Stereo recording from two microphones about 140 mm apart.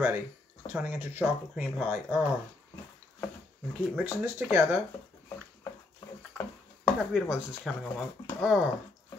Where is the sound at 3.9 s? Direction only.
15° right (ahead or behind).